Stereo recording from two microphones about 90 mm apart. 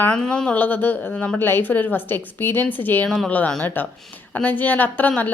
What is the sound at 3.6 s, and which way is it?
A woman's voice, 20° left (ahead or behind).